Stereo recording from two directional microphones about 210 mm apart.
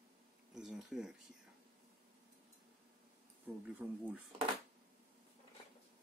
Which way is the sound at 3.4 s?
5° right (ahead or behind).